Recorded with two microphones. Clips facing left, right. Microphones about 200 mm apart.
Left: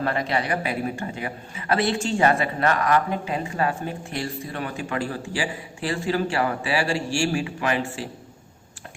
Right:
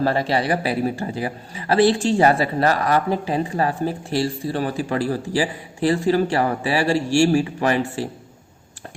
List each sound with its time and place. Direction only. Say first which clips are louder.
0.0 s a man's voice: right 5 dB; 35° right (ahead or behind)